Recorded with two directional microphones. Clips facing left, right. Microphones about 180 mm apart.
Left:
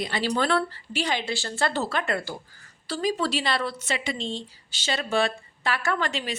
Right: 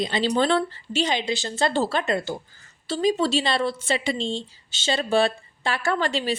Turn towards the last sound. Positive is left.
turn(degrees=-30)  # may be behind; listen again after turning